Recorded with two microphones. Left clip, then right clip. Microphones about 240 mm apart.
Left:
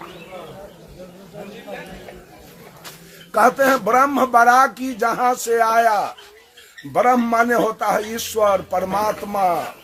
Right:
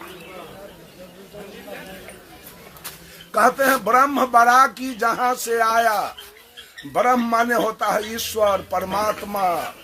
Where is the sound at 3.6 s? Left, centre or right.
Centre.